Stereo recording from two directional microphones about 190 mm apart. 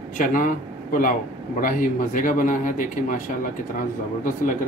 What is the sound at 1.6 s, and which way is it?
Speech, 45° left (ahead or behind).